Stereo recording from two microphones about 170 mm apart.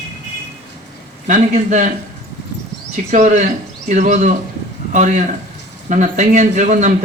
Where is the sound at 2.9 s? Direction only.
45° right (ahead or behind).